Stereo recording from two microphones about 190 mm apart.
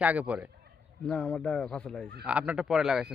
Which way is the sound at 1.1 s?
5° left (ahead or behind).